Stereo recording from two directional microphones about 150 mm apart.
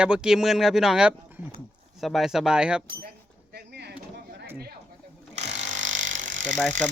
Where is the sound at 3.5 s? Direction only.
90° right.